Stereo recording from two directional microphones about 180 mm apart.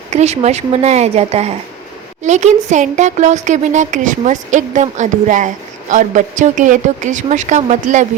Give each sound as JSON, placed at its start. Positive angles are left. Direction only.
{"t": 0.1, "sound": "a woman's voice", "side_deg": -40}